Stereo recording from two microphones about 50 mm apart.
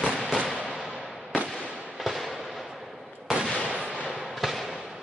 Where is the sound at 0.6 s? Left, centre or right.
Centre.